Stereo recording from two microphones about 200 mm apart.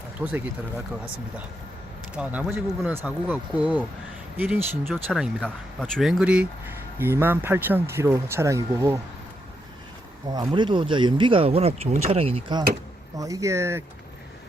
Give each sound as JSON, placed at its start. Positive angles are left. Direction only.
{"t": 0.2, "sound": "speech", "side_deg": -5}
{"t": 2.1, "sound": "speech", "side_deg": -5}
{"t": 10.3, "sound": "speech", "side_deg": -20}